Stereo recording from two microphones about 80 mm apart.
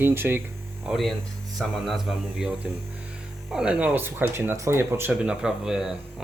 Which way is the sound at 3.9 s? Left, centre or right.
Right.